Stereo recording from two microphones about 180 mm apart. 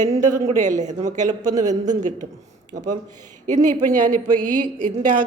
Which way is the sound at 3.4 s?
45° right (ahead or behind).